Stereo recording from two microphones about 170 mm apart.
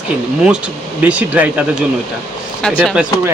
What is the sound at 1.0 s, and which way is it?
Speech, 10° right (ahead or behind).